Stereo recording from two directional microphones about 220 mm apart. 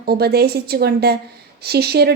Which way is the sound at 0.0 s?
45° right (ahead or behind).